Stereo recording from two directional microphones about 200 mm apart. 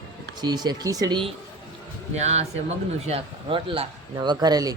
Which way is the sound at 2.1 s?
35° right (ahead or behind).